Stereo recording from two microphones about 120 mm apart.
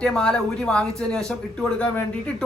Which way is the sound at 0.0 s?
5° left (ahead or behind).